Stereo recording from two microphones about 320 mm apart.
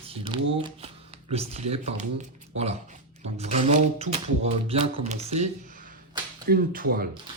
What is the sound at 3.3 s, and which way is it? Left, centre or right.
Speech, centre.